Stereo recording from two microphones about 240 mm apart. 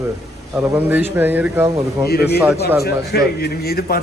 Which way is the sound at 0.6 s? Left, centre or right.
Centre.